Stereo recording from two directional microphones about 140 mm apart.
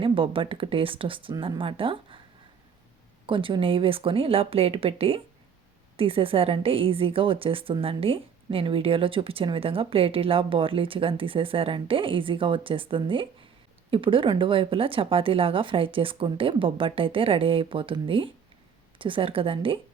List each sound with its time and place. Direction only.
0.0 s a woman's voice: 40° right (ahead or behind)
3.2 s a woman's voice: 35° right (ahead or behind)